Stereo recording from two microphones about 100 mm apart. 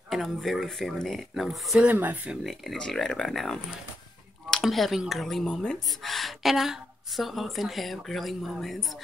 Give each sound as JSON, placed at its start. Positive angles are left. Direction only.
{"t": 0.1, "sound": "a woman's voice", "side_deg": 0}
{"t": 1.8, "sound": "speech", "side_deg": -20}
{"t": 2.4, "sound": "a woman's voice", "side_deg": 0}
{"t": 4.6, "sound": "a woman's voice", "side_deg": 0}